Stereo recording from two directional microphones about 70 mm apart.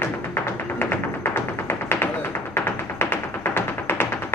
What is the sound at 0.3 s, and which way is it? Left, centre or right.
Music, left.